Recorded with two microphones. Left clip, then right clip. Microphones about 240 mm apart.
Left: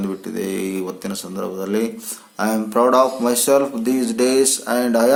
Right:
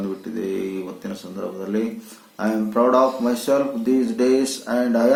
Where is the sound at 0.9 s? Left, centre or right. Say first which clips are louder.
Left 4 dB; left.